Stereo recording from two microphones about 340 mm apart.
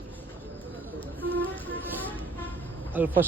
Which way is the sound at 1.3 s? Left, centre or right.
Centre.